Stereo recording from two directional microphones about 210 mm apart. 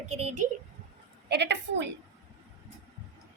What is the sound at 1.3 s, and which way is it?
Speech, 55° right (ahead or behind).